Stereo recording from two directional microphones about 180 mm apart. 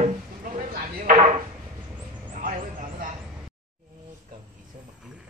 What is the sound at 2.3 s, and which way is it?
Vehicle, 50° right (ahead or behind).